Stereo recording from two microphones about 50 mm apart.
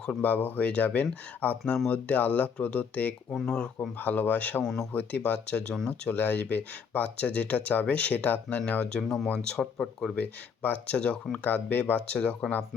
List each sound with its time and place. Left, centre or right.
0.1 s speech: left
3.4 s speech: centre
3.8 s speech: left
8.9 s speech: centre
10.2 s speech: left